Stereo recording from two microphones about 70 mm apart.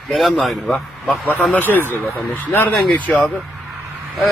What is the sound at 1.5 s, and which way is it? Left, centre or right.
Speech, left.